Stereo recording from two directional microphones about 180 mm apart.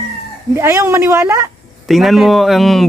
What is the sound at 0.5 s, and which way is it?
Speech, 15° right (ahead or behind).